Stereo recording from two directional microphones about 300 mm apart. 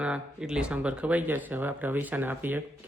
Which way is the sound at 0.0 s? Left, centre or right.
Centre.